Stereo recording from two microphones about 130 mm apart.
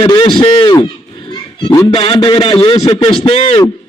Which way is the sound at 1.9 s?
45° left (ahead or behind).